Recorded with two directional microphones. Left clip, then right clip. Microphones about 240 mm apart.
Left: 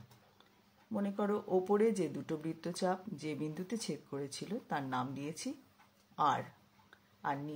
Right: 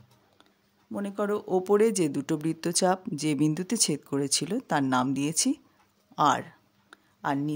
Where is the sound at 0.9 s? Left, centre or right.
Right.